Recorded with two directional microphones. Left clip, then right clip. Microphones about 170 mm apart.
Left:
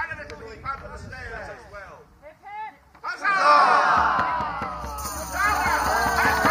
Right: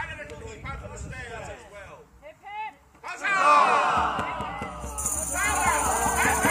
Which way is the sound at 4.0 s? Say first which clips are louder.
Left 5 dB; 90° right.